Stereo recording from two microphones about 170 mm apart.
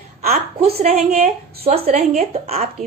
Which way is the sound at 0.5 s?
35° right (ahead or behind).